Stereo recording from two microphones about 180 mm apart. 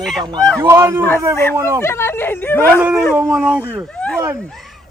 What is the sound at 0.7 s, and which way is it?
Speech, 15° right (ahead or behind).